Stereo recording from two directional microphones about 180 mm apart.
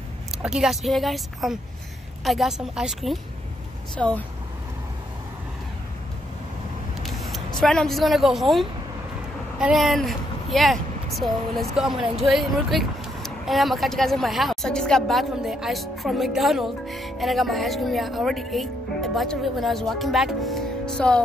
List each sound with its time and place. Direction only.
0.4 s speech: 5° right (ahead or behind)
7.0 s speech: centre (ahead or behind)